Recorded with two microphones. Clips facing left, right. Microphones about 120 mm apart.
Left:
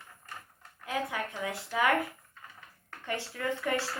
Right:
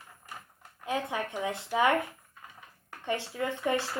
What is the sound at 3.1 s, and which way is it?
Speech, 15° right (ahead or behind).